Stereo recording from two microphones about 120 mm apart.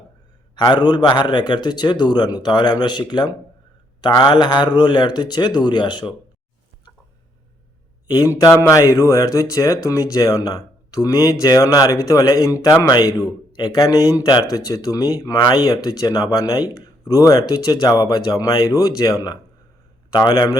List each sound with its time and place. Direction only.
0.5 s a man's voice: 40° left (ahead or behind)
8.0 s a man's voice: 30° left (ahead or behind)
20.1 s a man's voice: 35° left (ahead or behind)